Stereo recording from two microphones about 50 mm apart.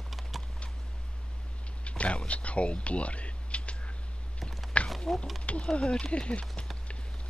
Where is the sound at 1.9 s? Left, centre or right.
Left.